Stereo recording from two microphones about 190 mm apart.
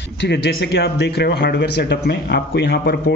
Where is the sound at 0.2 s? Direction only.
65° left (ahead or behind).